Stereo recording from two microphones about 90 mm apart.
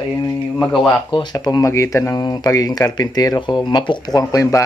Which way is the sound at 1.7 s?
30° left (ahead or behind).